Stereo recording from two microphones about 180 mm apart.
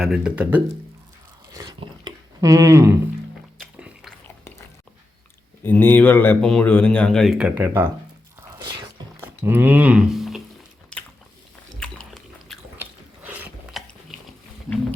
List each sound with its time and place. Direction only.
0.0 s speech: 5° right (ahead or behind)
1.5 s speech: 20° right (ahead or behind)
3.6 s music: 5° right (ahead or behind)
5.6 s speech: 10° left (ahead or behind); by 7.9 s 10° right (ahead or behind)
8.5 s whispering: 20° right (ahead or behind)
9.2 s speech: 10° right (ahead or behind)
10.9 s biting: 5° left (ahead or behind)
11.8 s a sound: 5° left (ahead or behind)
12.7 s ratchet: 10° right (ahead or behind)